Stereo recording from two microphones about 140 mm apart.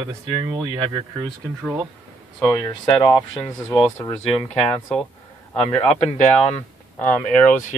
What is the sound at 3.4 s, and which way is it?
Speech, centre (ahead or behind).